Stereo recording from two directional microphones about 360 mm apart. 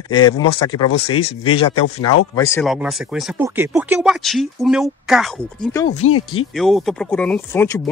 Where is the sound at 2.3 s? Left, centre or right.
Centre.